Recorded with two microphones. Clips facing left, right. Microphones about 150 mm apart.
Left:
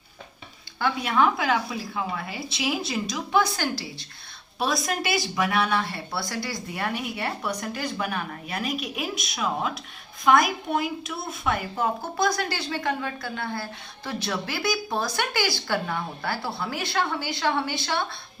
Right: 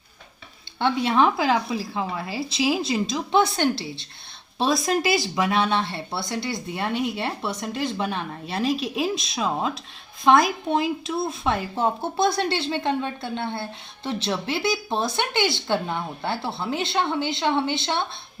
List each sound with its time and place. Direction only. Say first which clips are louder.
0.8 s speech: right 3 dB; 25° right (ahead or behind)